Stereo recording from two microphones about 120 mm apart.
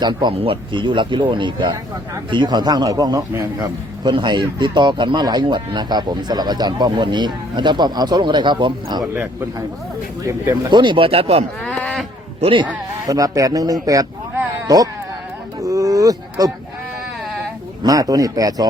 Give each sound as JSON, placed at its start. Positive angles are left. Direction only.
{"t": 0.0, "sound": "speech", "side_deg": -40}
{"t": 10.2, "sound": "speech", "side_deg": -25}
{"t": 10.7, "sound": "speech", "side_deg": -40}
{"t": 11.6, "sound": "livestock", "side_deg": 10}
{"t": 12.4, "sound": "speech", "side_deg": -45}
{"t": 13.1, "sound": "speech", "side_deg": -30}
{"t": 15.6, "sound": "a sound", "side_deg": -30}
{"t": 17.8, "sound": "speech", "side_deg": -30}